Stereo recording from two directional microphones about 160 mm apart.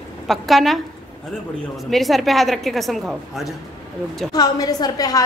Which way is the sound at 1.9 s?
Centre (ahead or behind).